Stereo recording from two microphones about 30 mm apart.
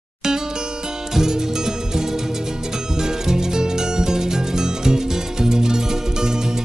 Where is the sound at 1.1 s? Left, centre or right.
Centre.